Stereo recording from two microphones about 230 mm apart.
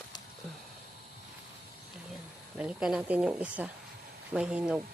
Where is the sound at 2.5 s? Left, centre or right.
Centre.